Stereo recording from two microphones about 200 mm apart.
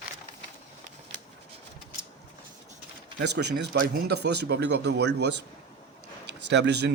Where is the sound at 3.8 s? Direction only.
50° right (ahead or behind).